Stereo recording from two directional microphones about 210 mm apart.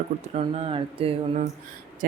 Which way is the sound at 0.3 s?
30° right (ahead or behind).